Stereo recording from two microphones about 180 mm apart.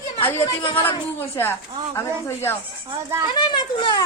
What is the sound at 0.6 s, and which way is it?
Speech, 30° left (ahead or behind).